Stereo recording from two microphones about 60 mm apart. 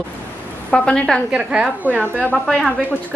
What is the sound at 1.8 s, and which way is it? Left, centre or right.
Speech, right.